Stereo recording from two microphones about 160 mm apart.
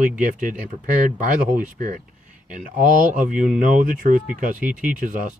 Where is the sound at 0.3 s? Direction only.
55° right (ahead or behind).